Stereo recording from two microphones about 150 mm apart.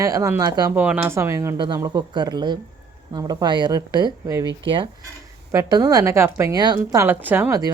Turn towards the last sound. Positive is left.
turn(degrees=-10)  # may be behind; listen again after turning